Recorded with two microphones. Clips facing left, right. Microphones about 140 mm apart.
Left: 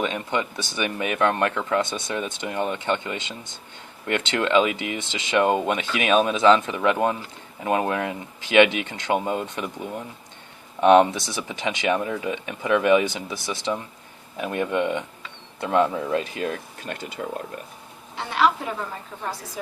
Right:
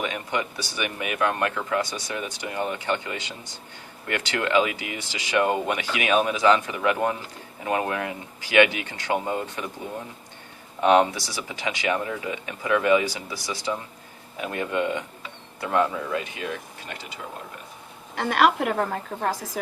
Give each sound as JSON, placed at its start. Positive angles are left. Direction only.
{"t": 0.0, "sound": "speech", "side_deg": 25}
{"t": 10.9, "sound": "speech", "side_deg": 20}
{"t": 16.2, "sound": "speech", "side_deg": 40}
{"t": 18.1, "sound": "a woman's voice", "side_deg": -60}